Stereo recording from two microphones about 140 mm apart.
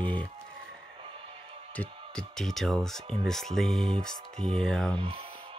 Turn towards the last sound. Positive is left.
turn(degrees=5)  # may be behind; listen again after turning